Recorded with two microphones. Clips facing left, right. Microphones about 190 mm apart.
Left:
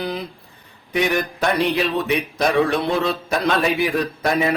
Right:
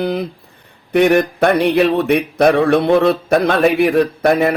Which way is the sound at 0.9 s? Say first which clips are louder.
Right 9 dB; 60° right (ahead or behind).